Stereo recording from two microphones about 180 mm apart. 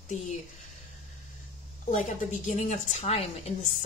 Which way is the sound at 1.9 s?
45° left (ahead or behind).